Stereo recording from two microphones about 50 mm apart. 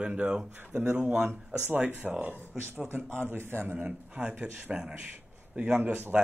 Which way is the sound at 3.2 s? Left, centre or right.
Right.